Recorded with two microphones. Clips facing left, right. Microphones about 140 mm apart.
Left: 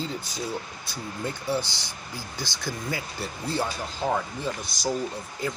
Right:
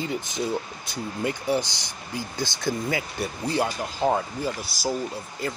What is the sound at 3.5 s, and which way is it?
Speech, 15° right (ahead or behind).